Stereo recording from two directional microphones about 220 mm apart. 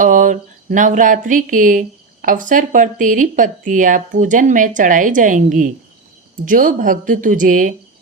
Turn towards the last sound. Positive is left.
turn(degrees=-35)  # may be behind; listen again after turning